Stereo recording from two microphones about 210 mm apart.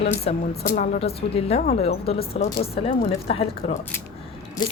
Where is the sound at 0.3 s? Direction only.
30° left (ahead or behind).